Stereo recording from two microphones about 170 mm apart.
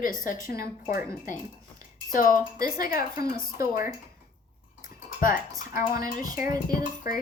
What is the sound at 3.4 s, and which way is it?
Speech, 60° left (ahead or behind).